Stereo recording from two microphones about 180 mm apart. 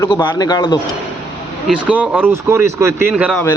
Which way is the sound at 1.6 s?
10° right (ahead or behind).